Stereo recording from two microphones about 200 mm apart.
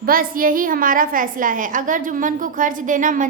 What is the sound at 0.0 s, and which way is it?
A woman's voice, 45° right (ahead or behind).